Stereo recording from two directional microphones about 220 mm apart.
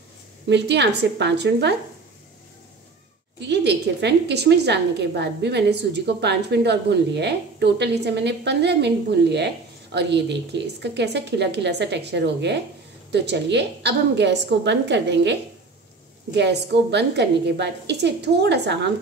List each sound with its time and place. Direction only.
0.5 s a woman's voice: 50° right (ahead or behind)
3.3 s a woman's voice: 50° right (ahead or behind)
16.3 s a woman's voice: 50° right (ahead or behind)